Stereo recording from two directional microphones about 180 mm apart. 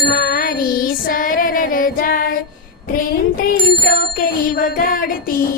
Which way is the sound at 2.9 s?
50° left (ahead or behind).